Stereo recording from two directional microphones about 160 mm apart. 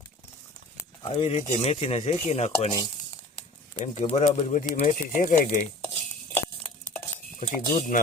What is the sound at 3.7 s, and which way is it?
Speech, 50° left (ahead or behind).